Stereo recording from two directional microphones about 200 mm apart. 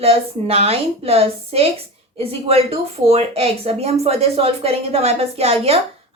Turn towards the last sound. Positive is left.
turn(degrees=-30)  # may be behind; listen again after turning